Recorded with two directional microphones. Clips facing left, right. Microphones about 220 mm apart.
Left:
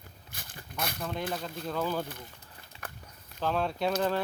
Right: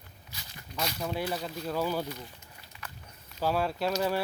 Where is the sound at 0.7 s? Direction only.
55° left (ahead or behind).